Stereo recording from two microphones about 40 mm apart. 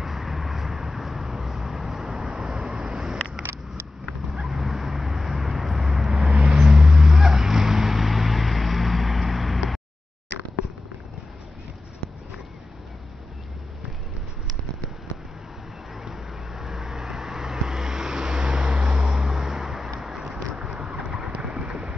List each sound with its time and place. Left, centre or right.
0.0 s vehicle: centre
4.5 s vehicle: centre
6.2 s vehicle: right; by 9.6 s centre
15.9 s vehicle: centre
20.0 s a sound: centre
20.6 s vehicle: centre
21.3 s boat: right